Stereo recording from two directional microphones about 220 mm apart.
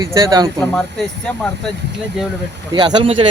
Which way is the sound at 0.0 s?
15° right (ahead or behind).